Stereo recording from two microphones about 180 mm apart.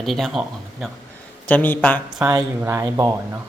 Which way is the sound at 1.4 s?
10° left (ahead or behind).